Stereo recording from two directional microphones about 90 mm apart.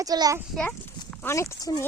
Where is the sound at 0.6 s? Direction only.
10° left (ahead or behind).